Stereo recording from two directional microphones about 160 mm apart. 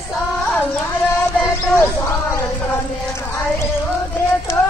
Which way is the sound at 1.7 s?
15° left (ahead or behind).